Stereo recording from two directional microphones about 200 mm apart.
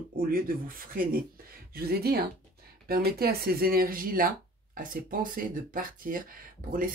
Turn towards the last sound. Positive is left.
turn(degrees=-45)  # may be behind; listen again after turning